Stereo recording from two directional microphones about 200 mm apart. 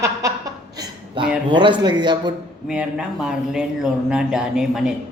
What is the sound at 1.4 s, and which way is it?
Speech, 25° right (ahead or behind).